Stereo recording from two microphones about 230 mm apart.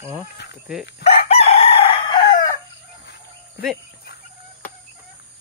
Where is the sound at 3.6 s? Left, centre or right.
Left.